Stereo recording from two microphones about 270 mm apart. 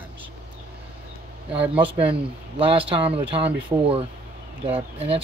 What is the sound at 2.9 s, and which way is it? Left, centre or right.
Speech, centre.